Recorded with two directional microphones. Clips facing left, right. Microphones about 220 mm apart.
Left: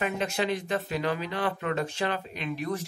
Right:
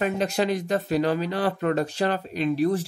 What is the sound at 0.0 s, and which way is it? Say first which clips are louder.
Speech: right 5 dB; 40° right (ahead or behind).